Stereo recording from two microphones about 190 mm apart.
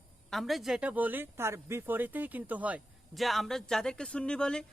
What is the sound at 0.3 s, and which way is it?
Speech, centre (ahead or behind).